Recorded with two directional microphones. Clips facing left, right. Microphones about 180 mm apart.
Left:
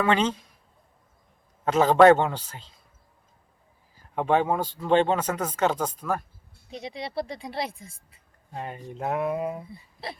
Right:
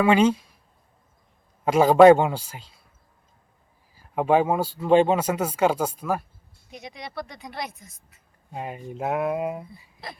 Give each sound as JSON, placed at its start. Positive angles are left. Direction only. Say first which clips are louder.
{"t": 0.0, "sound": "speech", "louder": "right 5 dB", "side_deg": -10}
{"t": 1.6, "sound": "speech", "louder": "right 3 dB", "side_deg": -10}
{"t": 3.9, "sound": "speech", "louder": "right 3 dB", "side_deg": -10}
{"t": 6.7, "sound": "speech", "louder": "left 4 dB", "side_deg": 30}
{"t": 8.5, "sound": "speech", "louder": "right 2 dB", "side_deg": -10}